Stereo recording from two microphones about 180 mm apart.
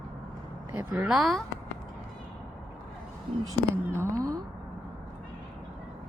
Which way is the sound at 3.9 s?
20° right (ahead or behind).